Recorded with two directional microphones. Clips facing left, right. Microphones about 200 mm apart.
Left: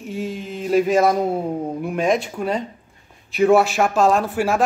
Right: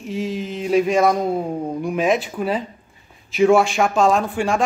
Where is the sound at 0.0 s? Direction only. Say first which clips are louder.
Right 2 dB; centre (ahead or behind).